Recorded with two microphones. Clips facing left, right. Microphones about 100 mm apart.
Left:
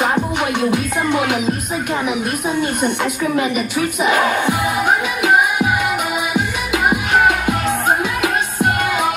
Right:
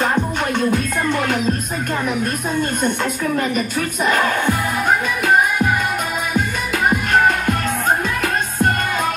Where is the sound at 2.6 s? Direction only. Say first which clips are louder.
Even; 10° left (ahead or behind).